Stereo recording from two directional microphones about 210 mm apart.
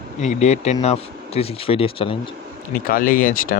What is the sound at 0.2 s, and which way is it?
Speech, 35° left (ahead or behind).